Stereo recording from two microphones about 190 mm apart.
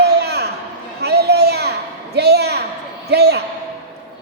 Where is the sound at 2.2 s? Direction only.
60° right (ahead or behind).